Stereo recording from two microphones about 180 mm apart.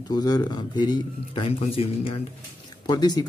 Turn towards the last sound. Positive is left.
turn(degrees=25)  # may be behind; listen again after turning